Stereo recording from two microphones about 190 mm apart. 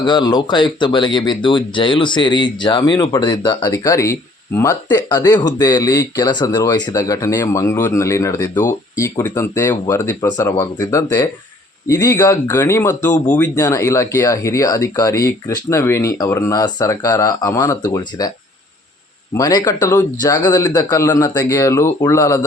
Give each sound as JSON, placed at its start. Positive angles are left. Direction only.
{"t": 0.0, "sound": "speech", "side_deg": 25}
{"t": 19.3, "sound": "speech", "side_deg": 20}